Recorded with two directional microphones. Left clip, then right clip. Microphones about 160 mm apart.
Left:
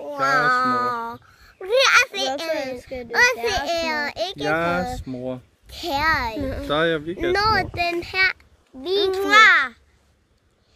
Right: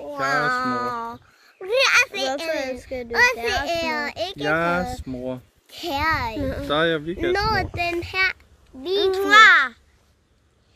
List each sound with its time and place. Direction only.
0.3 s a sound: 25° left (ahead or behind)
2.5 s a child's voice: 30° right (ahead or behind)
3.1 s a child's voice: 30° left (ahead or behind)
4.5 s speech: centre (ahead or behind)
5.7 s a child's voice: 30° left (ahead or behind)
6.6 s speech: centre (ahead or behind)
7.3 s a child's voice: 30° left (ahead or behind)
9.1 s a child's voice: 15° right (ahead or behind)